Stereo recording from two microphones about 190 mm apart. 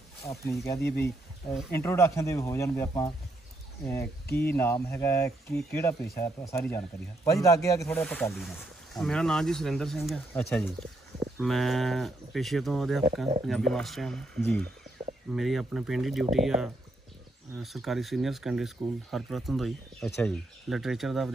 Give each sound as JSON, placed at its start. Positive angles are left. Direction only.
{"t": 0.2, "sound": "speech", "side_deg": 15}
{"t": 0.8, "sound": "speech", "side_deg": 60}
{"t": 1.7, "sound": "speech", "side_deg": 10}
{"t": 7.9, "sound": "speech", "side_deg": 5}